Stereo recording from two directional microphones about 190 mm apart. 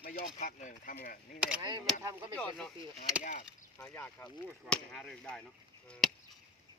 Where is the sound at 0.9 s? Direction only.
50° left (ahead or behind).